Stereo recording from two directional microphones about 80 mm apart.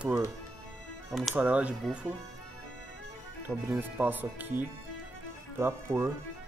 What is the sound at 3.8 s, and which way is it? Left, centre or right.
Speech, right.